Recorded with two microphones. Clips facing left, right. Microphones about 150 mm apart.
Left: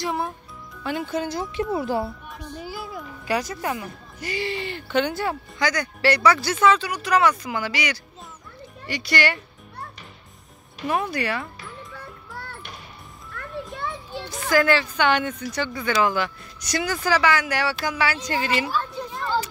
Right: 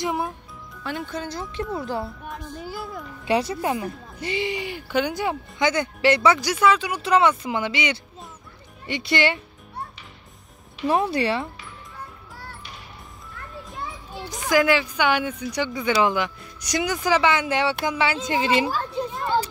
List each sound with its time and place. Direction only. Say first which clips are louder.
0.0 s music: right 1 dB; 15° right (ahead or behind)
0.8 s a child's voice: left 4 dB; 5° left (ahead or behind)
3.3 s speech: right 3 dB; 25° right (ahead or behind); by 6.9 s 10° right (ahead or behind)
6.9 s speech: right 1 dB; 25° right (ahead or behind)
10.9 s speech: right 3 dB; 30° right (ahead or behind)
11.9 s music: left 2 dB; 65° left (ahead or behind)
13.8 s children playing: left 3 dB; 70° left (ahead or behind)
14.3 s speech: even; 15° right (ahead or behind)